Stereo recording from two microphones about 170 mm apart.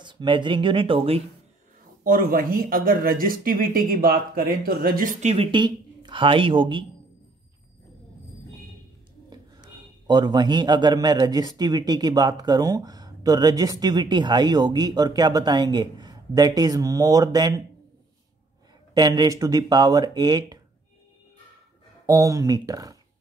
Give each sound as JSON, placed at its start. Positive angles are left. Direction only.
{"t": 0.0, "sound": "a man's voice", "side_deg": -25}
{"t": 2.0, "sound": "speech", "side_deg": -55}
{"t": 5.2, "sound": "speech", "side_deg": -35}
{"t": 9.3, "sound": "a man's voice", "side_deg": -25}
{"t": 18.9, "sound": "a man's voice", "side_deg": -20}
{"t": 22.0, "sound": "a man's voice", "side_deg": -20}